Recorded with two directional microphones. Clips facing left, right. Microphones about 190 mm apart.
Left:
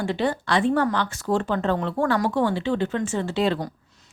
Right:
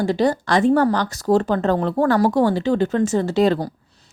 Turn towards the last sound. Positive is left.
turn(degrees=-40)  # may be behind; listen again after turning